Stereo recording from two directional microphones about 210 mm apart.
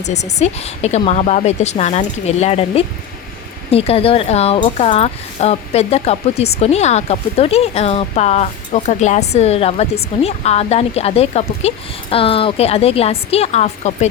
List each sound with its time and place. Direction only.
0.0 s a woman's voice: 35° left (ahead or behind)